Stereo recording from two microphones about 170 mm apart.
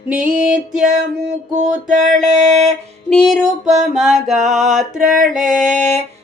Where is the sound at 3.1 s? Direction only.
5° left (ahead or behind).